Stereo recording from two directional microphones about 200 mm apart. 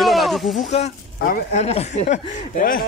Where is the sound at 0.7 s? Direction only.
40° left (ahead or behind).